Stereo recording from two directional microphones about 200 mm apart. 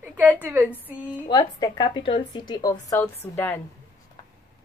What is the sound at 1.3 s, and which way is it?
A woman's voice, 20° left (ahead or behind).